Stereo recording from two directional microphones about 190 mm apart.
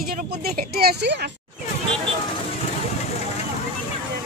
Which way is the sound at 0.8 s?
55° right (ahead or behind).